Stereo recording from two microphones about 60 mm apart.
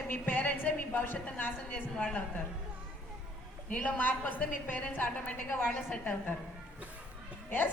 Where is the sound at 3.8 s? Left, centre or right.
Left.